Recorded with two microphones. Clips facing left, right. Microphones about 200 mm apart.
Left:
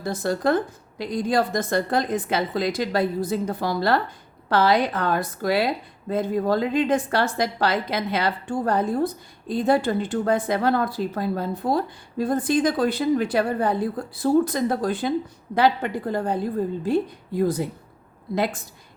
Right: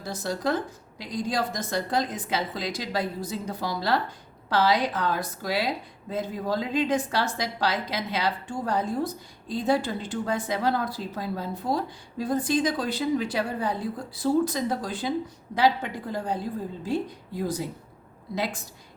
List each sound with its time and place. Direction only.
0.0 s a woman's voice: 55° left (ahead or behind)